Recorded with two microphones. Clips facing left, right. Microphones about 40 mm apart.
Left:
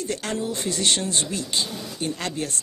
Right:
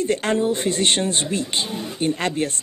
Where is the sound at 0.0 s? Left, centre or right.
Right.